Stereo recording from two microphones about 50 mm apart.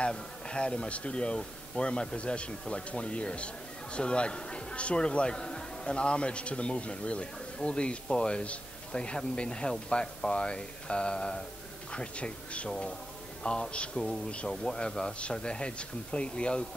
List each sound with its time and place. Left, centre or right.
0.0 s a man's voice: left